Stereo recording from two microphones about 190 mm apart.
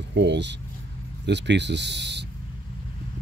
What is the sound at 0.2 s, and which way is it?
Speech, 65° right (ahead or behind).